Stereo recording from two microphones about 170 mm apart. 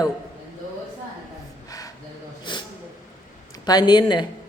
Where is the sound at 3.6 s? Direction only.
25° left (ahead or behind).